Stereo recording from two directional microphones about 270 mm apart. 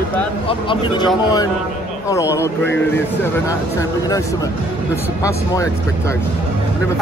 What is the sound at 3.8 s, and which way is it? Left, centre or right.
Speech, centre.